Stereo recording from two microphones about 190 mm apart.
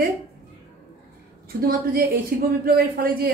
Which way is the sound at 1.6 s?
50° right (ahead or behind).